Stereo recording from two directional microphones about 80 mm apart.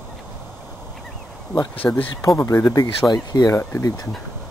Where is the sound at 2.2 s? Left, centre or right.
Left.